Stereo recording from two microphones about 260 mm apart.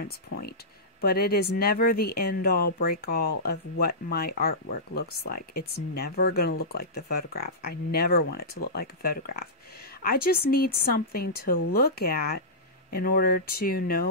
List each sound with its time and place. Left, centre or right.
0.0 s speech: left
10.5 s speech: left